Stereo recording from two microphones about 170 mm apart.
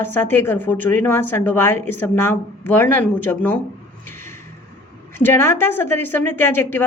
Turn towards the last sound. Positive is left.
turn(degrees=15)  # may be behind; listen again after turning